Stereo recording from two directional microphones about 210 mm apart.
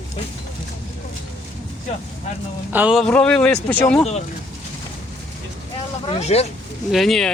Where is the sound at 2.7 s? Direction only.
5° right (ahead or behind).